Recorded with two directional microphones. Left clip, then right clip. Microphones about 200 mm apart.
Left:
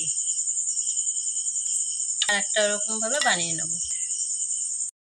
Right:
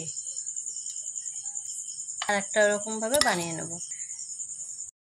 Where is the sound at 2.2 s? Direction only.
25° right (ahead or behind).